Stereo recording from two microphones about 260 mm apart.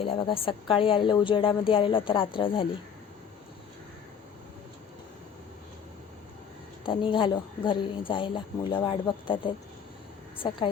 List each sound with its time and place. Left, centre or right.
0.0 s a woman's voice: centre
6.8 s a woman's voice: centre